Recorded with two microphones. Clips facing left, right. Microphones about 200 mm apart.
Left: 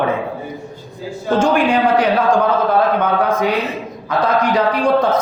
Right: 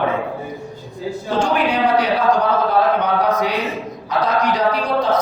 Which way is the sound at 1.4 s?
45° left (ahead or behind).